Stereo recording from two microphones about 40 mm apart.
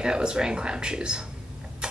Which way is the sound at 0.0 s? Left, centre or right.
Right.